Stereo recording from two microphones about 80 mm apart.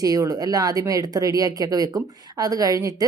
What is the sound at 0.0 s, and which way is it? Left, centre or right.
Speech, right.